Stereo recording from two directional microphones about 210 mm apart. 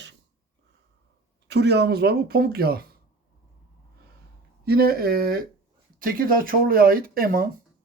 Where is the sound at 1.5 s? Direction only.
50° right (ahead or behind).